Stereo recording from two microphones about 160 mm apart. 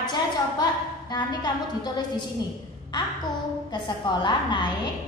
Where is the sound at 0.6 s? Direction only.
25° left (ahead or behind).